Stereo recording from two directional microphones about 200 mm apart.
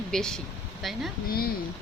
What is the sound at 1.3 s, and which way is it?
Speech, 50° left (ahead or behind).